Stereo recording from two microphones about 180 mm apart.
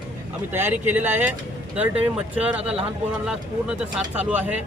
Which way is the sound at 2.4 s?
5° right (ahead or behind).